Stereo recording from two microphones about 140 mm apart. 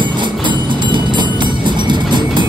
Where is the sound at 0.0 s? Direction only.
35° right (ahead or behind).